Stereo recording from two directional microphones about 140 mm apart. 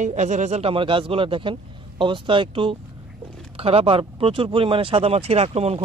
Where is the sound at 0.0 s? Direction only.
60° right (ahead or behind).